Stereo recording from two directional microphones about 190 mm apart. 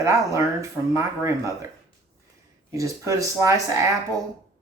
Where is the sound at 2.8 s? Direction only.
15° right (ahead or behind).